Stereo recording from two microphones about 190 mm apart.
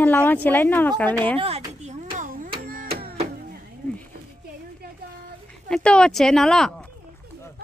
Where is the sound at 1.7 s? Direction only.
35° right (ahead or behind).